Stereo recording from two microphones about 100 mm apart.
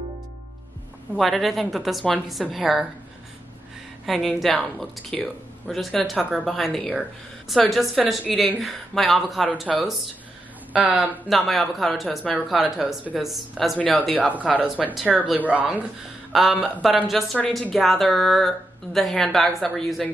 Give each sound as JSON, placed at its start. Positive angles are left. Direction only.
{"t": 1.1, "sound": "speech", "side_deg": 0}
{"t": 4.0, "sound": "speech", "side_deg": 0}
{"t": 10.7, "sound": "speech", "side_deg": -15}
{"t": 11.0, "sound": "speech", "side_deg": 0}
{"t": 13.7, "sound": "speech", "side_deg": 10}
{"t": 14.2, "sound": "speech", "side_deg": -15}
{"t": 16.3, "sound": "speech", "side_deg": 0}
{"t": 16.5, "sound": "speech", "side_deg": 15}
{"t": 16.8, "sound": "speech", "side_deg": 0}